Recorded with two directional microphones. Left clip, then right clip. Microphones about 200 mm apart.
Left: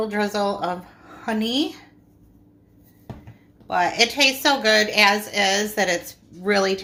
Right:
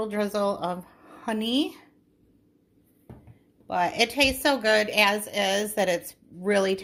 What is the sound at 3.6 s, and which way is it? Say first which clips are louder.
A woman's voice: left 5 dB; 40° right (ahead or behind).